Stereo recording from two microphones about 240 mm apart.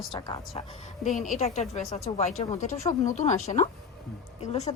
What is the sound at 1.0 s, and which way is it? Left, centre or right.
Speech, left.